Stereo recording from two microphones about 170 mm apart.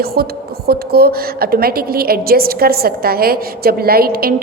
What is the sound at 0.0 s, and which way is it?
A woman's voice, 65° right (ahead or behind).